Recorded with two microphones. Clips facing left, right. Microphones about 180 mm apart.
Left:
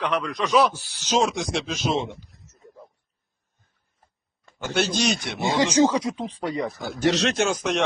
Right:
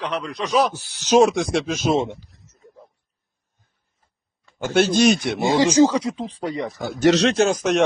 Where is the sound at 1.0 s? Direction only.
10° right (ahead or behind).